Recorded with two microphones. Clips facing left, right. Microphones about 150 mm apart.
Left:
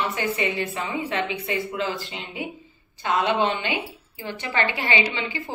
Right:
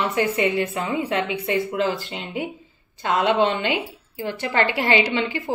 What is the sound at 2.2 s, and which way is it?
Speech, 55° right (ahead or behind).